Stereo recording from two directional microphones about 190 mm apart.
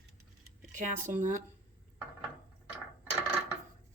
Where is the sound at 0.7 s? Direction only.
40° right (ahead or behind).